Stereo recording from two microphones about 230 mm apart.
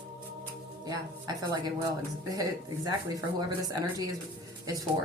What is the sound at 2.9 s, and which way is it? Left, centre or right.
Speech, centre.